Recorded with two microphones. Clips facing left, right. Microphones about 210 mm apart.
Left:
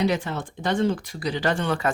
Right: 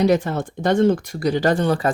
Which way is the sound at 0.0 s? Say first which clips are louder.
Right 6 dB; 45° right (ahead or behind).